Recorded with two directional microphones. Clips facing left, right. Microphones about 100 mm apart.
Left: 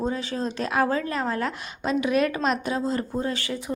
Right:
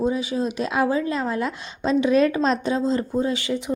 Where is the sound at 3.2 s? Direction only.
20° right (ahead or behind).